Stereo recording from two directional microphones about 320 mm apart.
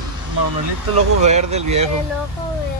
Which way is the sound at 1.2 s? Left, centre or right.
Right.